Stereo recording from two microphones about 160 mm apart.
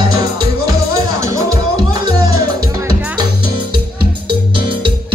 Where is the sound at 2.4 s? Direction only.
25° right (ahead or behind).